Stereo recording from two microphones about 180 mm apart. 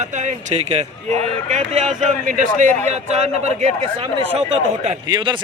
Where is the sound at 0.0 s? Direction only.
40° right (ahead or behind).